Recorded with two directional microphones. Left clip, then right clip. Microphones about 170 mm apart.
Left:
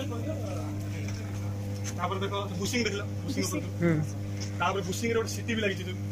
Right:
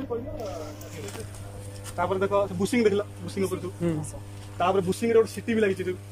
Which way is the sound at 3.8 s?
15° right (ahead or behind).